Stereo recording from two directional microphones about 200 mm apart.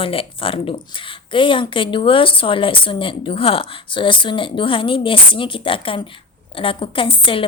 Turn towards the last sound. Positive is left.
turn(degrees=25)  # may be behind; listen again after turning